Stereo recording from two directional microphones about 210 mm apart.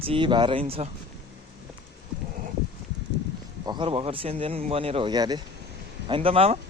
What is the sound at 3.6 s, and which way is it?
Speech, 20° right (ahead or behind).